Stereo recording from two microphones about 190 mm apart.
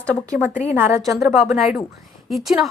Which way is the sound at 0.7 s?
10° right (ahead or behind).